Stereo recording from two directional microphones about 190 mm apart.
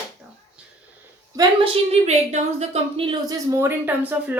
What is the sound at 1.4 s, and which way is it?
A woman's voice, 30° right (ahead or behind).